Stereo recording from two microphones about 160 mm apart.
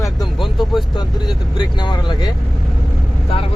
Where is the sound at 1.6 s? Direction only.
30° left (ahead or behind).